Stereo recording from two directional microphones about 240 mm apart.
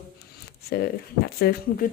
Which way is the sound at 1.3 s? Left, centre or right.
Left.